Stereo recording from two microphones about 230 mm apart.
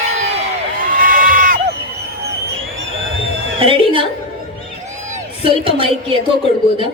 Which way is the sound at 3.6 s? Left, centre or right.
Right.